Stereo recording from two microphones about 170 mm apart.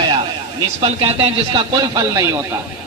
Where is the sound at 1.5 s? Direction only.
20° right (ahead or behind).